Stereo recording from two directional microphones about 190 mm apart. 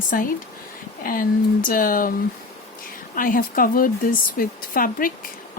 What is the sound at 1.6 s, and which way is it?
Speech, 45° left (ahead or behind).